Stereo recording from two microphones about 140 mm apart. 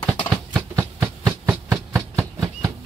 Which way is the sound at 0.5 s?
10° right (ahead or behind).